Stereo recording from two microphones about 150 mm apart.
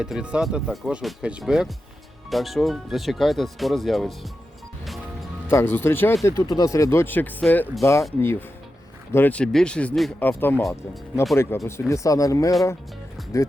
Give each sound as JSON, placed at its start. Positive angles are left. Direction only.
{"t": 0.0, "sound": "speech", "side_deg": -5}
{"t": 5.5, "sound": "speech", "side_deg": 15}
{"t": 10.5, "sound": "speech", "side_deg": 0}
{"t": 11.3, "sound": "speech", "side_deg": 20}